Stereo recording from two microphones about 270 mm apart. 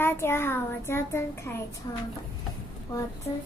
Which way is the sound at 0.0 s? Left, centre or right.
Centre.